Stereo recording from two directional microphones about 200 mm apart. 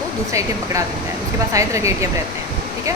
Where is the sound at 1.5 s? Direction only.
15° right (ahead or behind).